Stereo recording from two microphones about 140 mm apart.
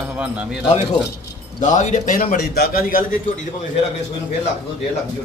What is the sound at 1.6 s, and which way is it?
A man's voice, 60° left (ahead or behind).